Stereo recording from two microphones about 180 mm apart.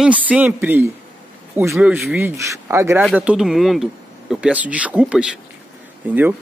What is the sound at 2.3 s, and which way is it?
A man's voice, 15° right (ahead or behind).